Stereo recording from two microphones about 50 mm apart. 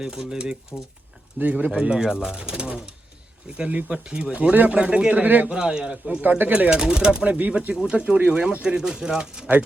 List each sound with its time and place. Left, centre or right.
0.0 s speech: centre
0.7 s speech: left
1.4 s speech: right
4.5 s speech: right
4.8 s speech: right
5.5 s speech: centre
6.2 s speech: right
6.7 s speech: centre
7.3 s speech: right; by 9.5 s centre